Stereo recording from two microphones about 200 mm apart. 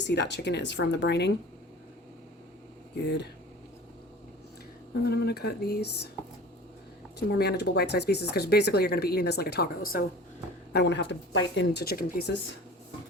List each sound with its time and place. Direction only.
0.0 s speech: 60° left (ahead or behind)
5.0 s speech: 55° left (ahead or behind)
7.2 s speech: 55° left (ahead or behind)